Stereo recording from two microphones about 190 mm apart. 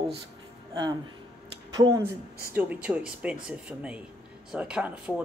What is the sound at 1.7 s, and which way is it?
Speech, 20° right (ahead or behind).